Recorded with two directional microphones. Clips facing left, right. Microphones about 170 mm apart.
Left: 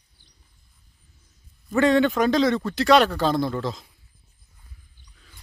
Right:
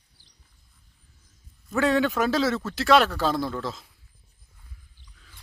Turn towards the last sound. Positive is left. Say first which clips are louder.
# left 4 dB
turn(degrees=0)  # may be behind; listen again after turning